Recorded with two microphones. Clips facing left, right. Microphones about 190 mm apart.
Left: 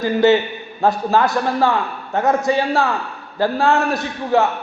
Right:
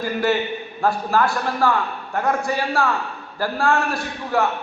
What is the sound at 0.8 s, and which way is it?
A man's voice, 20° left (ahead or behind).